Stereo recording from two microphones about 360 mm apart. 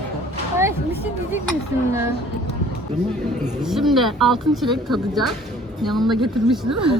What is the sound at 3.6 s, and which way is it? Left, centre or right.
Speech, centre.